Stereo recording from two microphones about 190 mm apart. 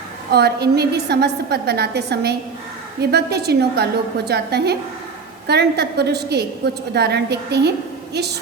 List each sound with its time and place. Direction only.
0.3 s a woman's voice: 60° right (ahead or behind)